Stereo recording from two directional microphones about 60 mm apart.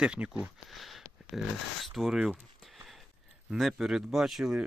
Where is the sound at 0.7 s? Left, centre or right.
Centre.